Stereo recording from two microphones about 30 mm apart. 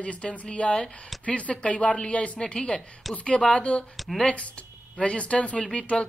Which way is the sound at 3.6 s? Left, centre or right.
Left.